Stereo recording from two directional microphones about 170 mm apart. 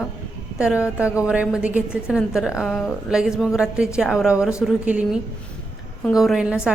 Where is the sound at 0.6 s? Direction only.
5° right (ahead or behind).